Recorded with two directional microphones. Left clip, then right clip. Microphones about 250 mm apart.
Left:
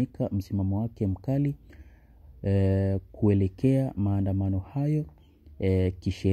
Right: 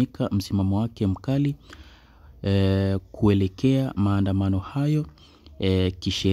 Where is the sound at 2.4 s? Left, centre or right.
Centre.